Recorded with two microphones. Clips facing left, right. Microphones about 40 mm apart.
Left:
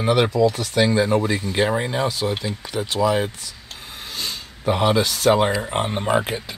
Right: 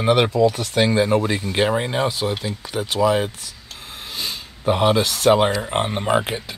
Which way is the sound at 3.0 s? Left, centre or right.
Centre.